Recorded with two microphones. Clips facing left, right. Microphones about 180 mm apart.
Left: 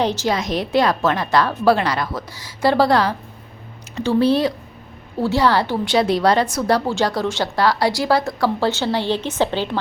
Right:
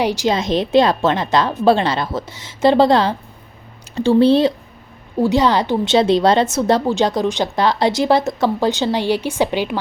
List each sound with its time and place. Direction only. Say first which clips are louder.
0.0 s a woman's voice: right 2 dB; 15° right (ahead or behind)
0.3 s a woman's voice: right 4 dB; 25° right (ahead or behind)